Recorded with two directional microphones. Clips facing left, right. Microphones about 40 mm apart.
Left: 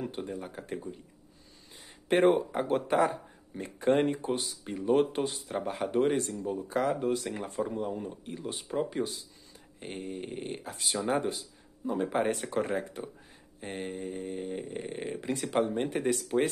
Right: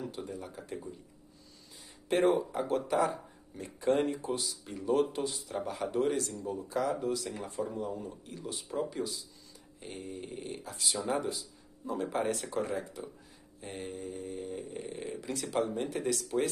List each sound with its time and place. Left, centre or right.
0.0 s speech: left
1.8 s speech: left
11.8 s speech: left